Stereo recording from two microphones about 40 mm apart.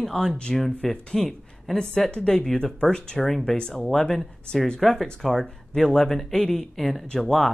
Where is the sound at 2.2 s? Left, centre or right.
Left.